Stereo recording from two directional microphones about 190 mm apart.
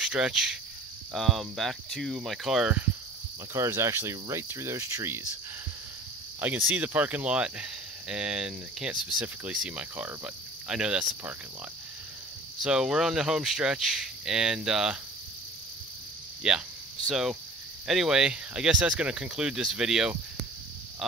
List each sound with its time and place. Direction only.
0.0 s cricket: 5° right (ahead or behind)
1.1 s speech: centre (ahead or behind); by 5.2 s 15° right (ahead or behind)
6.4 s speech: 10° right (ahead or behind)
12.6 s speech: 5° right (ahead or behind)
16.4 s speech: 5° right (ahead or behind)